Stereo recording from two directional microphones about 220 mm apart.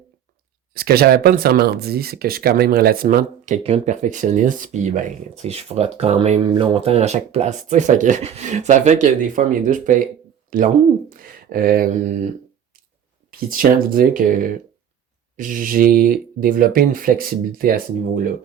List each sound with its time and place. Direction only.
0.7 s speech: 45° right (ahead or behind)
13.3 s speech: 40° right (ahead or behind)